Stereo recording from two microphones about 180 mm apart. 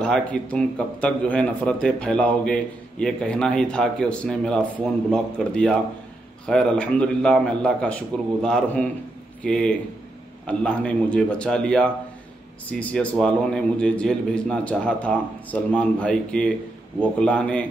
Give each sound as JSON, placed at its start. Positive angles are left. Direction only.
{"t": 0.0, "sound": "a man's voice", "side_deg": 5}